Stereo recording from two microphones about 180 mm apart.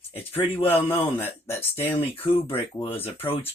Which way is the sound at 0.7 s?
10° left (ahead or behind).